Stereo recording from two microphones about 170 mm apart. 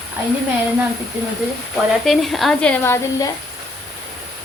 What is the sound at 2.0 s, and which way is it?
Speech, centre (ahead or behind).